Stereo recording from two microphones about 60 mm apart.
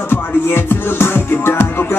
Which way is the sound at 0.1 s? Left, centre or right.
Left.